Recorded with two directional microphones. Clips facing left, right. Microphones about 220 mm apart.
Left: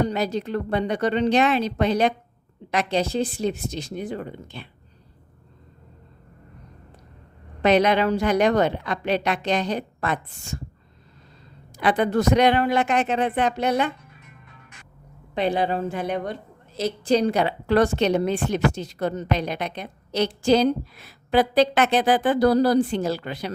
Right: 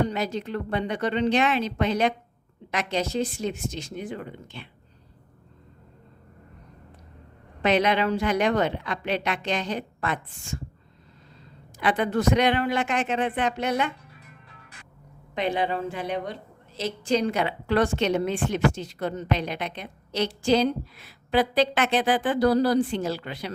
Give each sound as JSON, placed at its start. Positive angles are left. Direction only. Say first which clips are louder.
{"t": 0.0, "sound": "a woman's voice", "louder": "left 3 dB", "side_deg": 35}
{"t": 7.6, "sound": "a woman's voice", "louder": "left 4 dB", "side_deg": 40}
{"t": 11.8, "sound": "a woman's voice", "louder": "left 3 dB", "side_deg": 40}
{"t": 15.4, "sound": "a woman's voice", "louder": "left 3 dB", "side_deg": 35}